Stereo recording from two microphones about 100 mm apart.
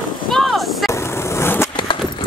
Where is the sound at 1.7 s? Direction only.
55° left (ahead or behind).